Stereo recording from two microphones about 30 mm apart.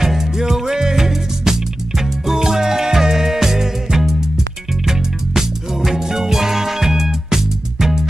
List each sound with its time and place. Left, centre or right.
0.0 s music: centre
5.9 s music: centre